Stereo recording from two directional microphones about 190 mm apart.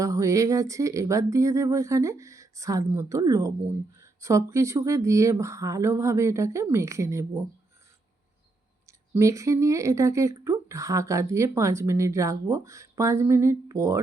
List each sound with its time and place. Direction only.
0.0 s speech: 15° right (ahead or behind)
8.9 s speech: 15° right (ahead or behind)